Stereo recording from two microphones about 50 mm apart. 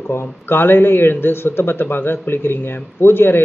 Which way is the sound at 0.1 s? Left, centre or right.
Left.